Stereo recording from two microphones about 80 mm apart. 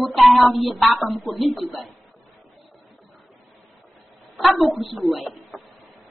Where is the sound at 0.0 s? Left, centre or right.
Centre.